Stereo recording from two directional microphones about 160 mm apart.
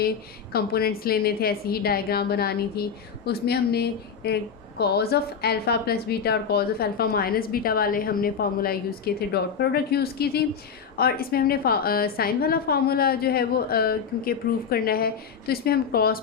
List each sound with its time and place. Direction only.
0.5 s a woman's voice: 75° left (ahead or behind)